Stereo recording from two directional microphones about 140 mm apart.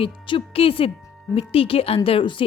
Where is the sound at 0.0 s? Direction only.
40° left (ahead or behind).